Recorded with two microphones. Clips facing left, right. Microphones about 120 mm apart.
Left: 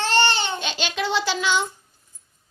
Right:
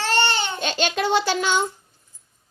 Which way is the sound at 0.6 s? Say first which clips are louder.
Right 4 dB; 50° right (ahead or behind).